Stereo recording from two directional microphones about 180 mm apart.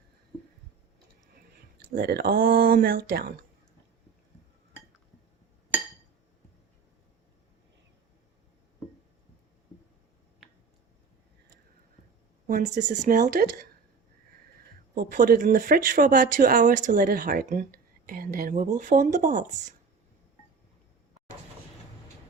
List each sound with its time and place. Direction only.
1.9 s speech: 60° right (ahead or behind)
12.5 s speech: 45° right (ahead or behind)
14.9 s speech: 55° right (ahead or behind)